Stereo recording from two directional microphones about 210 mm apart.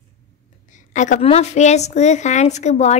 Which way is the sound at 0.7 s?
35° left (ahead or behind).